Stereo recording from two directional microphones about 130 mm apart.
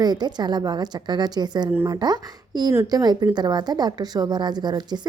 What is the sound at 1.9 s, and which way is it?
A woman's voice, 30° right (ahead or behind).